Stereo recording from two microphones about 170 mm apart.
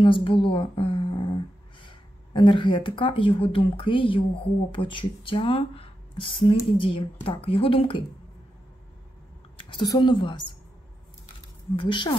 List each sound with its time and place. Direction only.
0.0 s speech: 30° left (ahead or behind)
9.6 s speech: 30° left (ahead or behind)
11.7 s a woman's voice: 30° left (ahead or behind)